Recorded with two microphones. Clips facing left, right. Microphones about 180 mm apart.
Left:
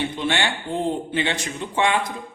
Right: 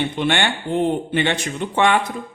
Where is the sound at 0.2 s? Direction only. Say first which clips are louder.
Right 3 dB; 65° right (ahead or behind).